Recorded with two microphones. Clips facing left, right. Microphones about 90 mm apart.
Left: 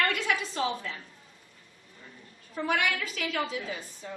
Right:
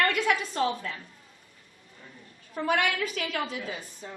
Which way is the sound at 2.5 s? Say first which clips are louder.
Right 2 dB; 45° right (ahead or behind).